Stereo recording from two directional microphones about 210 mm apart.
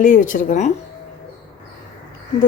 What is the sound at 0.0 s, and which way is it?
Speech, 40° left (ahead or behind).